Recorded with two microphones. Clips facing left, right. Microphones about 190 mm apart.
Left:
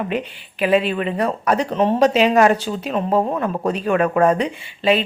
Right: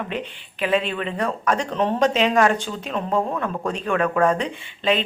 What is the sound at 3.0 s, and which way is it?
Speech, 35° left (ahead or behind).